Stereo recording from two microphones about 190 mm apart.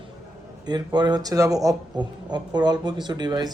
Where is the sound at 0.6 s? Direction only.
20° right (ahead or behind).